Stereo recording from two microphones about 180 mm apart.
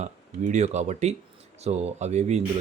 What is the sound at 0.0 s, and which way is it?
Speech, 40° right (ahead or behind).